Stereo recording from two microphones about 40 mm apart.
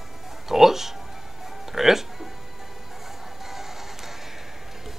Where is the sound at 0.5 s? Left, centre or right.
Centre.